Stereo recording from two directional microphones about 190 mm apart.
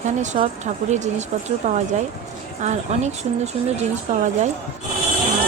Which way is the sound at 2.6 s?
35° right (ahead or behind).